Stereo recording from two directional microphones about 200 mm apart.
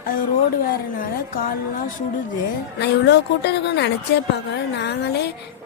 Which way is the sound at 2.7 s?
55° left (ahead or behind).